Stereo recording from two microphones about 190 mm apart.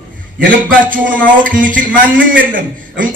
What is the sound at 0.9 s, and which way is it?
A man's voice, 45° right (ahead or behind).